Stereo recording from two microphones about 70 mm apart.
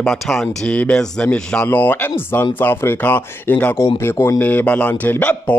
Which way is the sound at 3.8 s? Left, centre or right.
Left.